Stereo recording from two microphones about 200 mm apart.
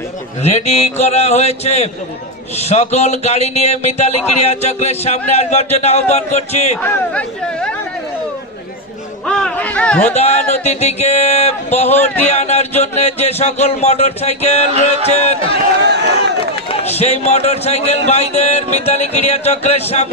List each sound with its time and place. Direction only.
0.4 s speech: 35° left (ahead or behind)
6.8 s speech: 5° left (ahead or behind)
9.2 s speech: 5° left (ahead or behind)
10.1 s speech: 35° left (ahead or behind)
15.9 s a sound: 60° right (ahead or behind)
17.0 s speech: 35° left (ahead or behind)